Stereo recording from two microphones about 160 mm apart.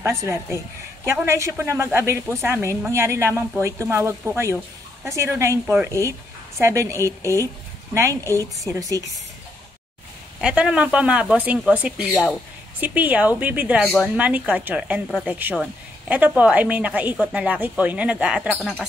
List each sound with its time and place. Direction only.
0.0 s a woman's voice: 15° right (ahead or behind)
10.4 s a woman's voice: 5° right (ahead or behind)